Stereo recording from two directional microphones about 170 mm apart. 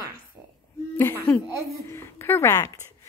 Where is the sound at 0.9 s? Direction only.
10° left (ahead or behind).